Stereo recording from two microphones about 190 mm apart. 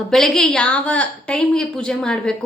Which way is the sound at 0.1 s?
Centre (ahead or behind).